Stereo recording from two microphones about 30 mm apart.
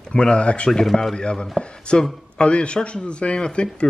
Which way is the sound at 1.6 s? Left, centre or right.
Left.